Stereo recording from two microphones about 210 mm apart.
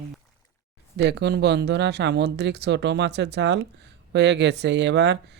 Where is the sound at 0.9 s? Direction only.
55° right (ahead or behind).